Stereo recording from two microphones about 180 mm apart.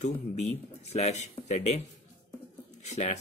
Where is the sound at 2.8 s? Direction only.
40° left (ahead or behind).